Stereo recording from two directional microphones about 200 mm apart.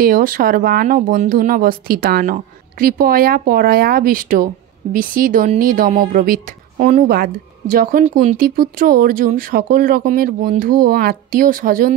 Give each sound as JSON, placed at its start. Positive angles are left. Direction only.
{"t": 0.0, "sound": "speech", "side_deg": -45}